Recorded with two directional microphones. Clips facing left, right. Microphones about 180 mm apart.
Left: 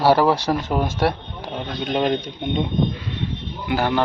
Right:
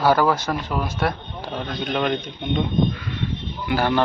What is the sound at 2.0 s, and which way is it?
A man's voice, 30° left (ahead or behind).